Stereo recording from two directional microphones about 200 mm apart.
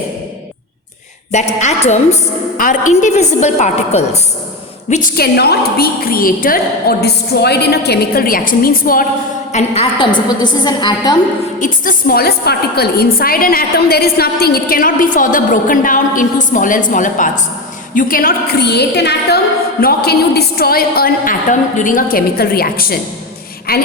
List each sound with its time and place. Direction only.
1.5 s a woman's voice: 35° left (ahead or behind)
9.5 s a woman's voice: 30° left (ahead or behind)
11.6 s a woman's voice: 45° left (ahead or behind)